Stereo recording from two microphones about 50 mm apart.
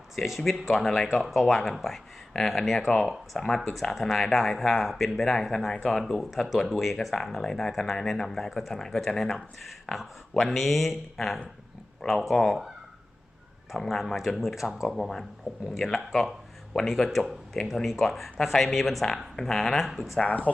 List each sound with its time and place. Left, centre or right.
0.2 s speech: centre
13.8 s speech: centre
14.9 s speech: centre
20.2 s speech: left